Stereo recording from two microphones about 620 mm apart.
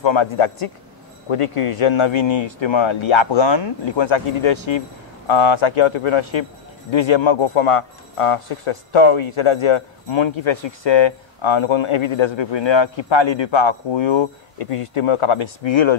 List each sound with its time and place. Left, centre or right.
0.0 s speech: left